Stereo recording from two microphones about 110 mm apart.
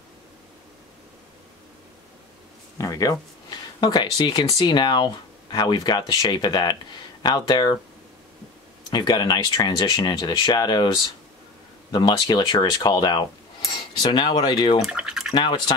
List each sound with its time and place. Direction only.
2.8 s speech: 30° left (ahead or behind)
8.9 s speech: 35° left (ahead or behind)
11.9 s speech: 40° left (ahead or behind)
14.8 s speech: 5° right (ahead or behind)